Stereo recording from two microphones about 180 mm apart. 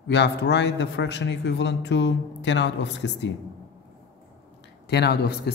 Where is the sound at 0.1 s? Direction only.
75° left (ahead or behind).